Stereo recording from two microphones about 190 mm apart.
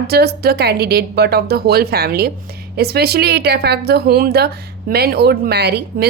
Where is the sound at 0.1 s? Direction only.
55° right (ahead or behind).